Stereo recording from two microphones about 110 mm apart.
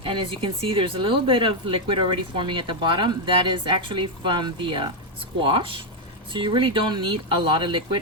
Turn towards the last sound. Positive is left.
turn(degrees=-50)  # may be behind; listen again after turning